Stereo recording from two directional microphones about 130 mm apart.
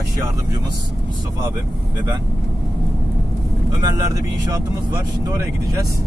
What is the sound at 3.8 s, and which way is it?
Speech, 30° right (ahead or behind).